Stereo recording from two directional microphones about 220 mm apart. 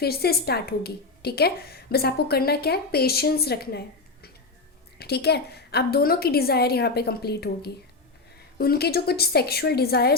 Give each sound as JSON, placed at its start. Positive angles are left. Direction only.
{"t": 0.0, "sound": "a woman's voice", "side_deg": 45}